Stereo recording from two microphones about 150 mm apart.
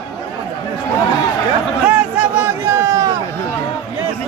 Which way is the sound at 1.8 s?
10° right (ahead or behind).